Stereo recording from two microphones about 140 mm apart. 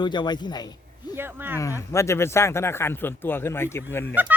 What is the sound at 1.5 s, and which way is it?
Speech, 20° left (ahead or behind).